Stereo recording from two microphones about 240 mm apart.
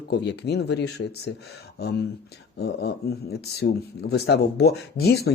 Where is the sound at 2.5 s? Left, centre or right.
Left.